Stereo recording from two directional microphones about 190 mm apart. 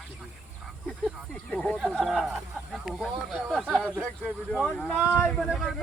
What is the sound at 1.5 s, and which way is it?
Speech, 5° left (ahead or behind).